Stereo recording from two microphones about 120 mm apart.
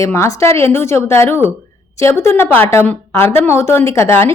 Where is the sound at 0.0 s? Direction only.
25° left (ahead or behind).